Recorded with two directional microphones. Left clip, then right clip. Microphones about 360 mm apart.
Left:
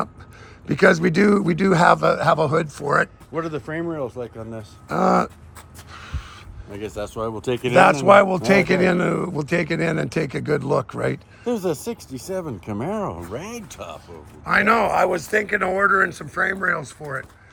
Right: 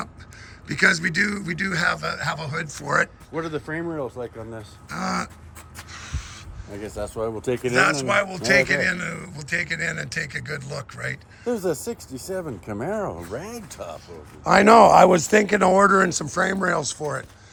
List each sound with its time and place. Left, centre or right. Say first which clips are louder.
0.7 s speech: left 3 dB; centre
3.3 s speech: left 2 dB; left
4.9 s speech: left 9 dB; centre
5.7 s gasp: right 1 dB; centre
6.7 s speech: left 1 dB; centre
14.4 s speech: right 5 dB; centre
15.3 s speech: right 3 dB; right
15.5 s speech: right 1 dB; centre